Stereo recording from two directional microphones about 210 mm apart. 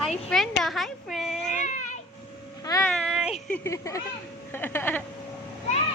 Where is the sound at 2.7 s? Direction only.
15° left (ahead or behind).